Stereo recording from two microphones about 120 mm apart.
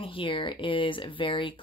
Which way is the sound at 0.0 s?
45° left (ahead or behind).